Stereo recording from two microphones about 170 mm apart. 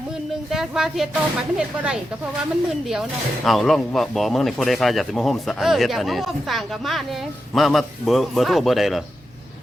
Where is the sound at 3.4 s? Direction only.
Centre (ahead or behind).